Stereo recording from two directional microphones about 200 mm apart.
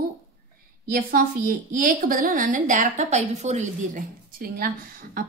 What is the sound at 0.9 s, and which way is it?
A woman's voice, 45° right (ahead or behind).